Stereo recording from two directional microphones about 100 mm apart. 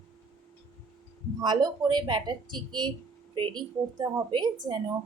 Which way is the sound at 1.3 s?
45° right (ahead or behind).